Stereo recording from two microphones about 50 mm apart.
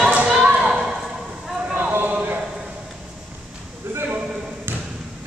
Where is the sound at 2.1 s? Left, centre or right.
Right.